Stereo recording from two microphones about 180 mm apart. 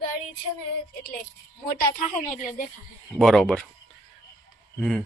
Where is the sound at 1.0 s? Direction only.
55° left (ahead or behind).